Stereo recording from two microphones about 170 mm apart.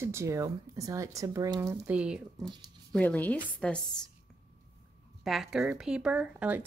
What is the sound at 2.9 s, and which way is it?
A woman's voice, 10° left (ahead or behind).